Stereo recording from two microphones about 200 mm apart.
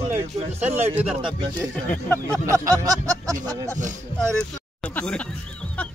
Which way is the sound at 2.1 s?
15° right (ahead or behind).